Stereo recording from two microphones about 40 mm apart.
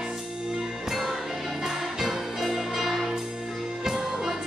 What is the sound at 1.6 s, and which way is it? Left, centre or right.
Music, centre.